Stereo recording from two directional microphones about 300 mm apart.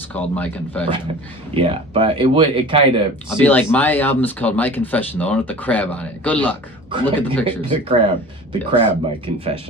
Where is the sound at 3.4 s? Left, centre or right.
Centre.